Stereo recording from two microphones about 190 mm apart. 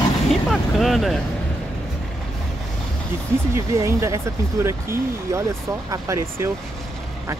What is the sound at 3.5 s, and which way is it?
Speech, 15° right (ahead or behind).